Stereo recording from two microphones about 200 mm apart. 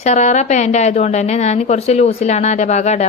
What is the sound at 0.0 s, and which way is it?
Speech, 35° left (ahead or behind).